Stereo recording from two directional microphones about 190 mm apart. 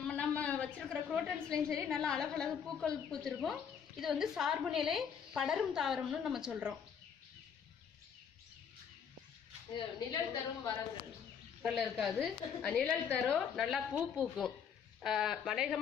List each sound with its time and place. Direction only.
0.0 s a sound: 5° left (ahead or behind)
1.9 s speech: 5° left (ahead or behind)
9.8 s a woman's voice: 20° left (ahead or behind)
11.6 s speech: centre (ahead or behind)